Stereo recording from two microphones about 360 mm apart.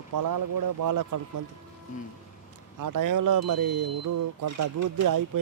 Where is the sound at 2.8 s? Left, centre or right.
Right.